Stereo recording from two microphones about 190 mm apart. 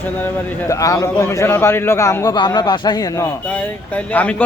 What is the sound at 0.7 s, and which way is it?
A man's voice, 15° left (ahead or behind).